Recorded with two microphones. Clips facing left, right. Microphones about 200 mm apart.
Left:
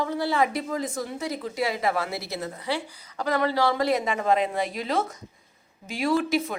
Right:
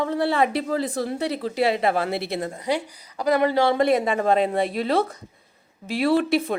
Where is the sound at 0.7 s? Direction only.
35° right (ahead or behind).